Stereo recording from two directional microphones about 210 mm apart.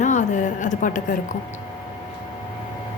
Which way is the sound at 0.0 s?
35° left (ahead or behind).